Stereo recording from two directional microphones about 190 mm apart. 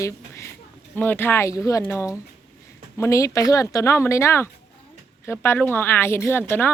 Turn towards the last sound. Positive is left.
turn(degrees=10)  # may be behind; listen again after turning